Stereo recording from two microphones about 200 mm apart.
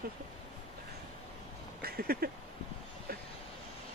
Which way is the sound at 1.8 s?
50° right (ahead or behind).